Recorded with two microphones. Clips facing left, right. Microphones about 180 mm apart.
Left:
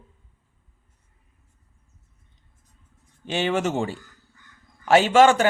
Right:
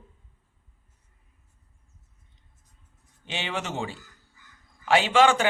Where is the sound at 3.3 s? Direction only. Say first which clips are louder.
Left 9 dB; 45° left (ahead or behind).